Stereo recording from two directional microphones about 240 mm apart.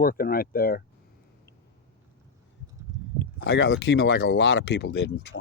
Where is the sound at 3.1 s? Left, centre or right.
Left.